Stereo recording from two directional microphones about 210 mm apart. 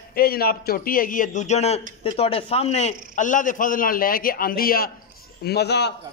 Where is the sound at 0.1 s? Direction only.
45° left (ahead or behind).